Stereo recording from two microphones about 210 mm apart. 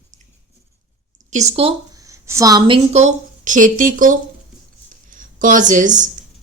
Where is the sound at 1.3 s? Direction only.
30° right (ahead or behind).